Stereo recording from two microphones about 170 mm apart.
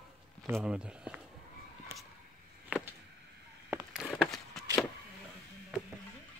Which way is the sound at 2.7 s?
5° right (ahead or behind).